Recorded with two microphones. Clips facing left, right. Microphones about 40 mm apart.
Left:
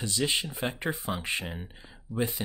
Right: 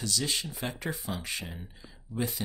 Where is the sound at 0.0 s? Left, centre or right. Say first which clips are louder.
Left 3 dB; left.